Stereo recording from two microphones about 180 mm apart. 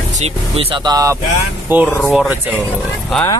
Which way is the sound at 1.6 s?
10° right (ahead or behind).